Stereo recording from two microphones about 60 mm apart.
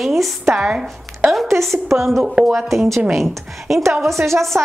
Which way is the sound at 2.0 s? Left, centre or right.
Centre.